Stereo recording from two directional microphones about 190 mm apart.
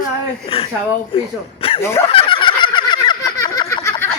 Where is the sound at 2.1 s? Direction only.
25° left (ahead or behind).